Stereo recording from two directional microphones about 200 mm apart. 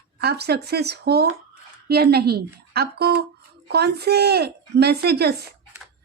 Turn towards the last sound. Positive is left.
turn(degrees=-55)  # may be behind; listen again after turning